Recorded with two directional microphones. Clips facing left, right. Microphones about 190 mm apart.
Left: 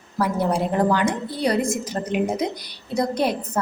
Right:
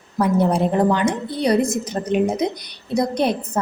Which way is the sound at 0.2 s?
20° right (ahead or behind).